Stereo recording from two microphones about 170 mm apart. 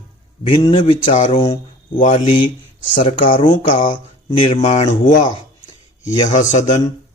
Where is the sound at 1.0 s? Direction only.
45° left (ahead or behind).